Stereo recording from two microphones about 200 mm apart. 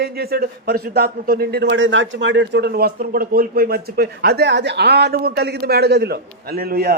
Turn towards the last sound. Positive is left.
turn(degrees=-50)  # may be behind; listen again after turning